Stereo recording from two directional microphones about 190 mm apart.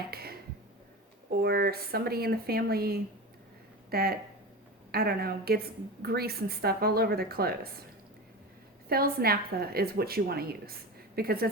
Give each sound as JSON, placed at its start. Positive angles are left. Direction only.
{"t": 0.1, "sound": "a sound", "side_deg": -55}
{"t": 1.4, "sound": "a woman's voice", "side_deg": -55}
{"t": 8.9, "sound": "a woman's voice", "side_deg": -55}